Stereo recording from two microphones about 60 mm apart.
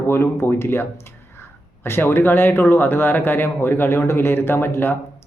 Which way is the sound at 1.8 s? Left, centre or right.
Left.